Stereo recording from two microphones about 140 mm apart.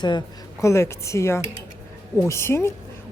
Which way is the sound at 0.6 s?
20° left (ahead or behind).